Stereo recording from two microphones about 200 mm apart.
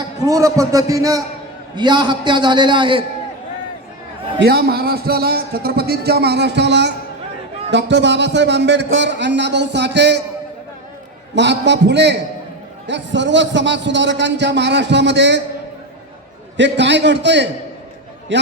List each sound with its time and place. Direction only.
0.2 s a man's voice: 15° right (ahead or behind)
4.4 s a man's voice: 55° right (ahead or behind)
11.3 s a man's voice: 60° right (ahead or behind)
16.6 s a man's voice: 60° right (ahead or behind)